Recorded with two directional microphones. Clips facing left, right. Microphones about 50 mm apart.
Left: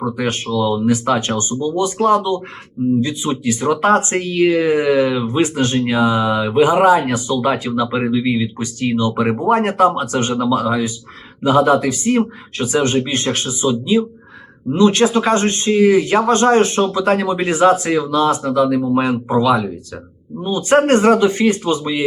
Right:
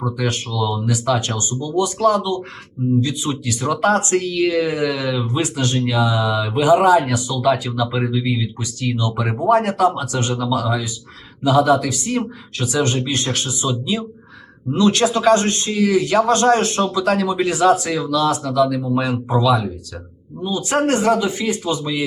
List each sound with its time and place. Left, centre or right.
0.0 s speech: left